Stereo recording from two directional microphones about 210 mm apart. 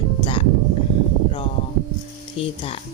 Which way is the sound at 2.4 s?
25° left (ahead or behind).